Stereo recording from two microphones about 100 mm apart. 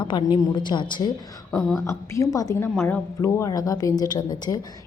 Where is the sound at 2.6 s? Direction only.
20° left (ahead or behind).